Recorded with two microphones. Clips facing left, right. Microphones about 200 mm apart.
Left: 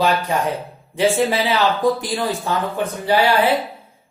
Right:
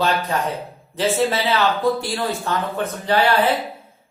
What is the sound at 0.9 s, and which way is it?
A man's voice, 10° left (ahead or behind).